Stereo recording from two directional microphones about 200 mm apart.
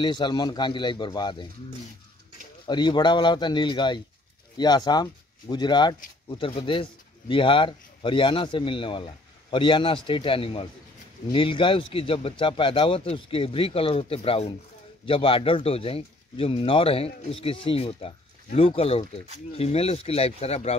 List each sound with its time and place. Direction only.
0.0 s speech: 20° left (ahead or behind)
2.6 s a man's voice: 25° left (ahead or behind)